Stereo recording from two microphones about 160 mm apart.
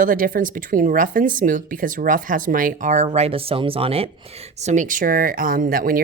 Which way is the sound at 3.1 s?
40° right (ahead or behind).